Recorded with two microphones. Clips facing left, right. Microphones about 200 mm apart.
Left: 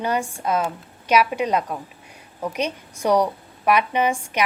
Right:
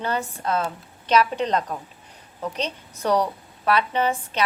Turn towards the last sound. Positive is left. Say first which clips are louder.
# left 2 dB
turn(degrees=15)  # may be behind; listen again after turning